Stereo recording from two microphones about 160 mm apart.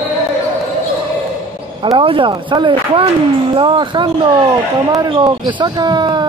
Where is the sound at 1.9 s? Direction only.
35° right (ahead or behind).